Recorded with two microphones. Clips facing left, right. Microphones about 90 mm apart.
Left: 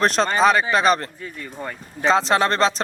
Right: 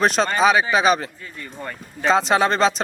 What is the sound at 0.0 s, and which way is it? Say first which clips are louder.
Speech: even; centre (ahead or behind).